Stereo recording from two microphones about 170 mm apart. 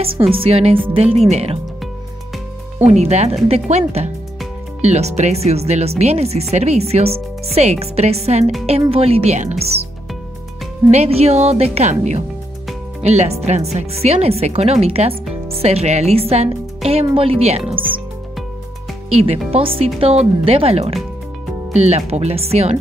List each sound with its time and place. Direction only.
0.3 s speech: 35° right (ahead or behind)
2.8 s speech: 40° right (ahead or behind)
10.9 s speech: 40° right (ahead or behind)
19.0 s speech: 35° right (ahead or behind)